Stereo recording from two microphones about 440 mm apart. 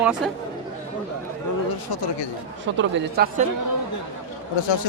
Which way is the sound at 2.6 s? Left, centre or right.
Right.